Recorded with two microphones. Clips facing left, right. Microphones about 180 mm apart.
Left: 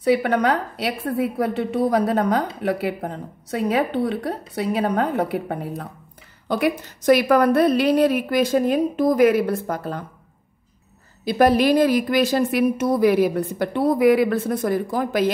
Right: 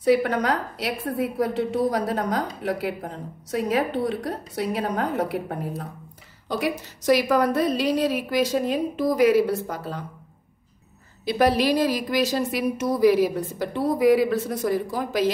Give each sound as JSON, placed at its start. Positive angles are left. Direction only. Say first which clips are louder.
{"t": 0.0, "sound": "a woman's voice", "louder": "left 2 dB", "side_deg": 60}
{"t": 6.5, "sound": "a woman's voice", "louder": "left 5 dB", "side_deg": 60}
{"t": 11.2, "sound": "a woman's voice", "louder": "left 4 dB", "side_deg": 50}